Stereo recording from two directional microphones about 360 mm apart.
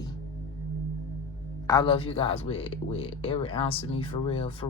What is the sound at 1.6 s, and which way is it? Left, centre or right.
Speech, centre.